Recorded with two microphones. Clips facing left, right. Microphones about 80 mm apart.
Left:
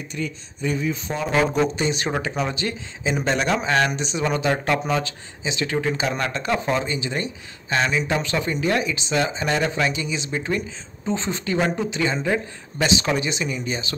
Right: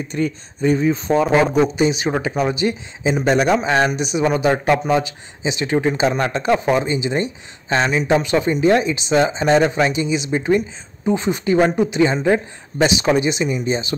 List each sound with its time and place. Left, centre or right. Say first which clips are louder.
0.1 s speech: right 8 dB; right
1.5 s speech: right 5 dB; centre; by 13.9 s right